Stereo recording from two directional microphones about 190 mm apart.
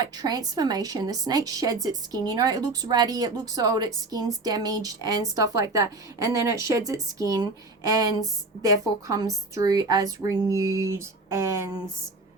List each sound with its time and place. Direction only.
0.0 s a woman's voice: 20° right (ahead or behind)